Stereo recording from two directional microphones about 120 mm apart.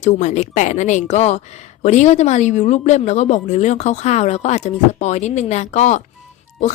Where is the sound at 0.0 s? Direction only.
75° left (ahead or behind).